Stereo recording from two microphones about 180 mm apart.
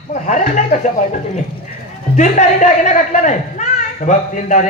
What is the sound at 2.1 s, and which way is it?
Speech, 40° left (ahead or behind).